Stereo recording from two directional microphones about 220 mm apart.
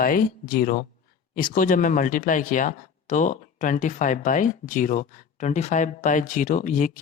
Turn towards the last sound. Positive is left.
turn(degrees=35)  # may be behind; listen again after turning